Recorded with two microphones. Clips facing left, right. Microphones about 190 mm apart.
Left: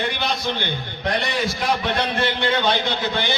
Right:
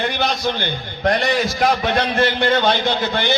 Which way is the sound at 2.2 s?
45° right (ahead or behind).